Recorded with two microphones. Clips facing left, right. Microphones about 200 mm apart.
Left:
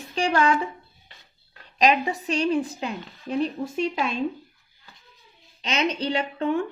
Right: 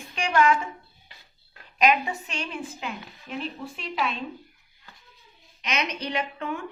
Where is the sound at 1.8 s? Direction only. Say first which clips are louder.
Left 2 dB; 35° left (ahead or behind).